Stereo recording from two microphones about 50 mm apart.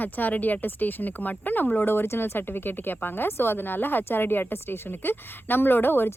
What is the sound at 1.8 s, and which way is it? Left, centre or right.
A woman's voice, left.